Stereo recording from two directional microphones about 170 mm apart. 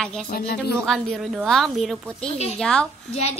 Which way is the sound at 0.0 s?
Centre (ahead or behind).